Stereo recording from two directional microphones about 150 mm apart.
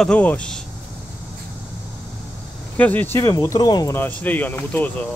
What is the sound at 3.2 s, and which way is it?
Speech, 25° left (ahead or behind).